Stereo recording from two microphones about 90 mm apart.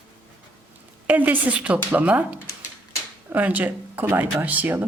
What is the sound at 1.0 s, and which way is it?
A woman's voice, 20° right (ahead or behind).